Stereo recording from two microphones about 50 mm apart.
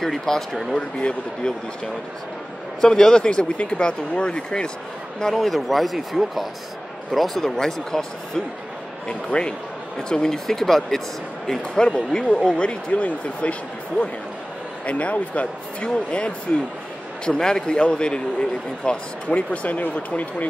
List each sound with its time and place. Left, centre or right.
0.0 s speech: centre
0.7 s speech: centre
2.8 s speech: centre
5.2 s speech: centre; by 13.6 s left
14.9 s speech: left